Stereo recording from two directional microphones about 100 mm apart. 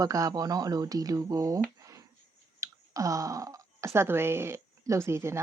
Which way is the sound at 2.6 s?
35° right (ahead or behind).